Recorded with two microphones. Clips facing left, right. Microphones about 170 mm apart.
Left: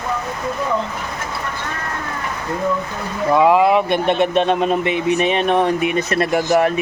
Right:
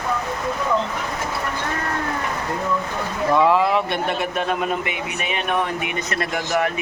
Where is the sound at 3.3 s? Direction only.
15° left (ahead or behind).